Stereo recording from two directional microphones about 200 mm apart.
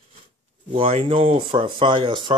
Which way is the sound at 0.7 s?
30° right (ahead or behind).